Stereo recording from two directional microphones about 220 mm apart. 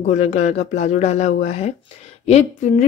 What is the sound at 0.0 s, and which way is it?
Speech, 30° left (ahead or behind).